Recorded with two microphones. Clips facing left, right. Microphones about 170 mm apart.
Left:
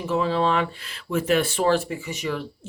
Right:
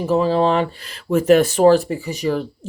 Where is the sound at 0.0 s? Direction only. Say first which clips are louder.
Right 6 dB; 35° right (ahead or behind).